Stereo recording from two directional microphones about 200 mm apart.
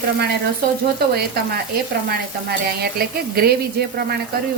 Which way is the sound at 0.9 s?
55° right (ahead or behind).